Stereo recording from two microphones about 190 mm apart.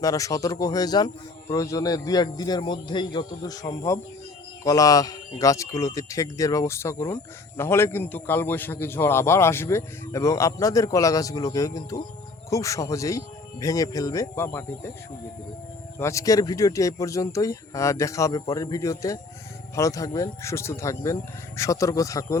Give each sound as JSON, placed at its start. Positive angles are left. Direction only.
{"t": 0.0, "sound": "speech", "side_deg": 15}
{"t": 16.0, "sound": "speech", "side_deg": 15}